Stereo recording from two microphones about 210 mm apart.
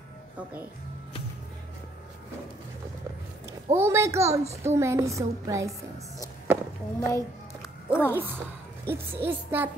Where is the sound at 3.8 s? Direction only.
15° right (ahead or behind).